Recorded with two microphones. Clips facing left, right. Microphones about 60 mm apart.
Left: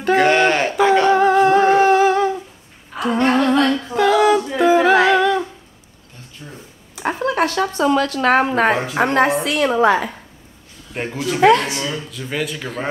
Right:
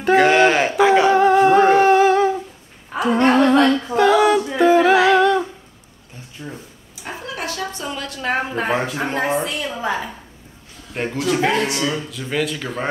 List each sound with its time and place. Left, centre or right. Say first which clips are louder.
0.0 s a sound: right 1 dB; centre
3.0 s humming: right 2 dB; centre
3.9 s female singing: left 1 dB; centre
6.4 s a sound: right 5 dB; centre
7.0 s a sound: left 10 dB; left
7.8 s a woman's voice: left 14 dB; left
11.0 s speech: right 2 dB; centre
11.4 s a woman's voice: left 10 dB; left
11.7 s speech: right 2 dB; centre